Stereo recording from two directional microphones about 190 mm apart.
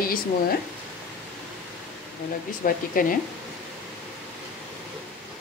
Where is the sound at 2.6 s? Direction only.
45° left (ahead or behind).